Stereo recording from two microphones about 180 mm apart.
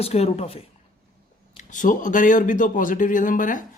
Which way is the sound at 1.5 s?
45° left (ahead or behind).